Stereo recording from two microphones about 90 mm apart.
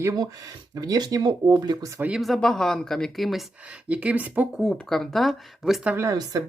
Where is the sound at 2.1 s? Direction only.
Centre (ahead or behind).